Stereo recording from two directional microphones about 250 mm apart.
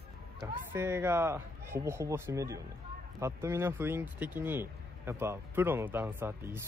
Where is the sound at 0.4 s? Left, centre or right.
Centre.